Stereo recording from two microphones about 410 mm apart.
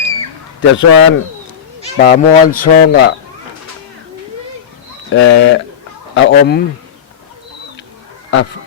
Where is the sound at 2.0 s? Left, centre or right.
Left.